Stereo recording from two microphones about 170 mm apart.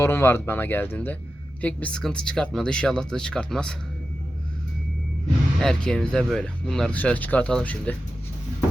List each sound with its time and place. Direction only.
0.0 s speech: 15° left (ahead or behind)
5.5 s speech: 5° left (ahead or behind)